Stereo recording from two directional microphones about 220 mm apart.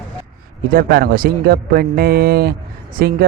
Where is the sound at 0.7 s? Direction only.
40° right (ahead or behind).